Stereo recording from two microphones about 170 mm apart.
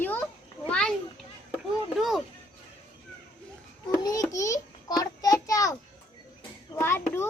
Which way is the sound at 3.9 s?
20° left (ahead or behind).